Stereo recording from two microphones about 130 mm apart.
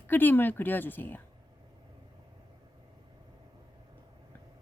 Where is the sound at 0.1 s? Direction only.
15° left (ahead or behind).